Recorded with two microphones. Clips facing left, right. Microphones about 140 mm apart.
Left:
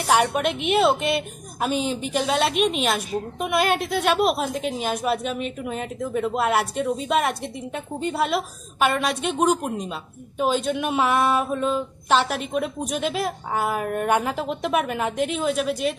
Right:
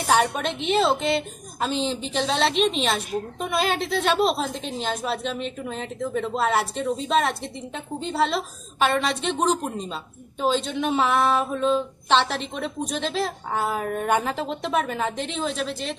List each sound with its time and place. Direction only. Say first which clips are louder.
0.1 s a woman's voice: left 2 dB; 10° left (ahead or behind)